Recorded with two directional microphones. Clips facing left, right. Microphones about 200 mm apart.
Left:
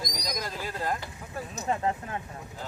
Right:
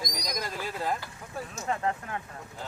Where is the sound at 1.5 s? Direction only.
20° left (ahead or behind).